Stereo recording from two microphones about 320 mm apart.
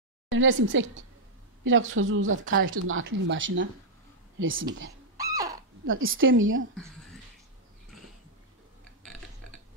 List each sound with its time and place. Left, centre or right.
0.3 s speech: right
5.1 s a sound: centre
5.9 s speech: right